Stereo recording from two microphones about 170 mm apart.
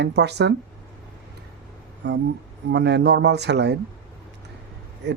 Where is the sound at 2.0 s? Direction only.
85° right.